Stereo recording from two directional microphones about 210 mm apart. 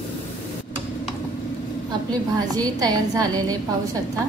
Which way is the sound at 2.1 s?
20° right (ahead or behind).